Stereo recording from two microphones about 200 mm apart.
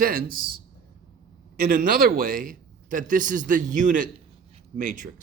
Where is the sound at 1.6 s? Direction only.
45° right (ahead or behind).